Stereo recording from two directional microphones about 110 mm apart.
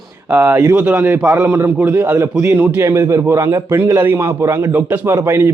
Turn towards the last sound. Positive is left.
turn(degrees=-25)  # may be behind; listen again after turning